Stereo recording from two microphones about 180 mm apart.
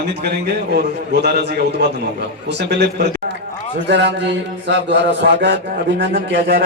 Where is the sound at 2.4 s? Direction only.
70° right (ahead or behind).